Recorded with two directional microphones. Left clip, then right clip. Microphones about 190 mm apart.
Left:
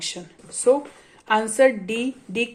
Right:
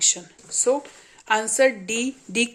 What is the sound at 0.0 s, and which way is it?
A woman's voice, 15° right (ahead or behind).